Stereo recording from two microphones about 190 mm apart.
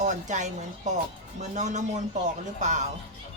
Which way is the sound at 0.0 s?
40° right (ahead or behind).